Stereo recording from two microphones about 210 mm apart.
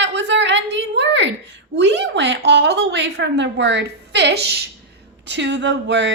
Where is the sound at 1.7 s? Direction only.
55° right (ahead or behind).